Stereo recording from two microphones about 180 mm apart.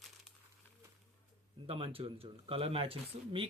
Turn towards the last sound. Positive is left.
turn(degrees=-30)  # may be behind; listen again after turning